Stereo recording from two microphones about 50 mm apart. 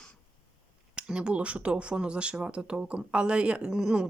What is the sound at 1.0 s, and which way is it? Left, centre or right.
Speech, centre.